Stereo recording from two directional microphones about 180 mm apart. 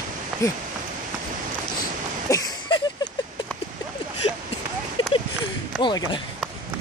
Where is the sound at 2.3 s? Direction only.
15° left (ahead or behind).